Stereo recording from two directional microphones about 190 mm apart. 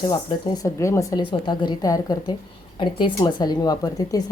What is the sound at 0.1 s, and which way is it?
A woman's voice, 20° left (ahead or behind).